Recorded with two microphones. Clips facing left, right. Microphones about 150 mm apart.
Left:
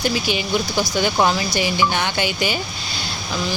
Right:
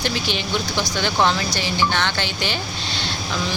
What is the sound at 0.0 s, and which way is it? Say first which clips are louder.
Speech: left 3 dB; 5° left (ahead or behind).